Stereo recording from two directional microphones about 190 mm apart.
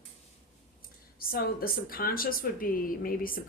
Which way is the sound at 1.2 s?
50° left (ahead or behind).